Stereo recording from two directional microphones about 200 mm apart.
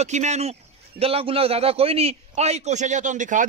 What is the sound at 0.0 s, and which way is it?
A man's voice, 35° right (ahead or behind).